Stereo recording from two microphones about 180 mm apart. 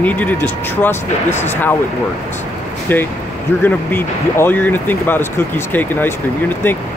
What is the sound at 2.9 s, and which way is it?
Speech, 10° left (ahead or behind).